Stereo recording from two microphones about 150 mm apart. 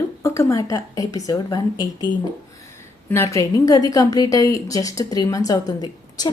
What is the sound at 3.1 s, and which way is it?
A woman's voice, 20° left (ahead or behind).